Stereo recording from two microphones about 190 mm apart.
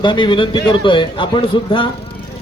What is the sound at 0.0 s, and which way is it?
A man's voice, 25° left (ahead or behind).